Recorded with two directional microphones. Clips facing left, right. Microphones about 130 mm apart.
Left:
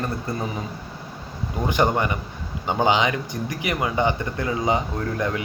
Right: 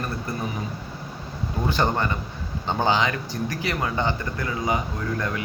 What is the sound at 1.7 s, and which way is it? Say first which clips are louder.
Speech: left 3 dB; 15° left (ahead or behind).